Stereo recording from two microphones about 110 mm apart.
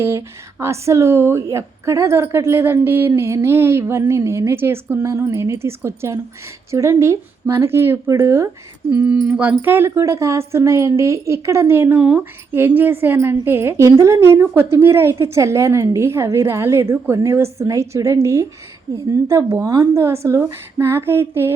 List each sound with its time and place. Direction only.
0.0 s speech: 25° right (ahead or behind)